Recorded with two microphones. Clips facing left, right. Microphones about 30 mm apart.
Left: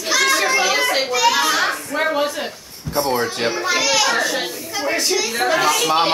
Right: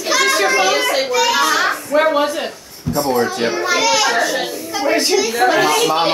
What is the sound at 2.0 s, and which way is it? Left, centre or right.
Speech, centre.